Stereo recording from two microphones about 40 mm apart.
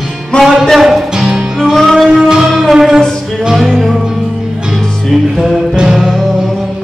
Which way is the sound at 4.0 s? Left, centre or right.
Centre.